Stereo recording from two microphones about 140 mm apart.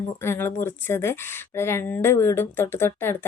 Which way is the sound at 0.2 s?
15° left (ahead or behind).